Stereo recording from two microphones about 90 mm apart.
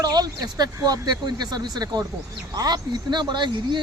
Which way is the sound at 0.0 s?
50° right (ahead or behind).